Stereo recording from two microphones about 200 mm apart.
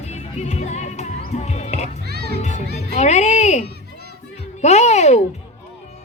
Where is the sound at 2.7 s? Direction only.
35° left (ahead or behind).